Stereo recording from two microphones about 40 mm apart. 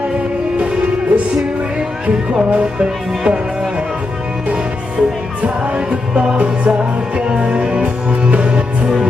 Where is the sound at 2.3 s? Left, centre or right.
Right.